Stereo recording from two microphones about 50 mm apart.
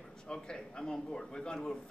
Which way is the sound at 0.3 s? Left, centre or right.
Centre.